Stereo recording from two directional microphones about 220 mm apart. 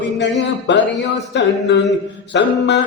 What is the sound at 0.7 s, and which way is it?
Music, 50° left (ahead or behind).